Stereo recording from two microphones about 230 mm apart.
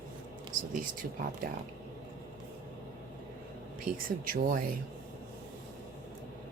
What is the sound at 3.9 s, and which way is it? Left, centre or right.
Speech, right.